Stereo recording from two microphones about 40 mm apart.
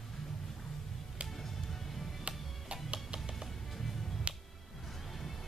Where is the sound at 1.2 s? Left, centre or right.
Centre.